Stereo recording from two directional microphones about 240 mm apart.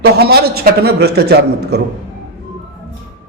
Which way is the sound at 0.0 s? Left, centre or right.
Right.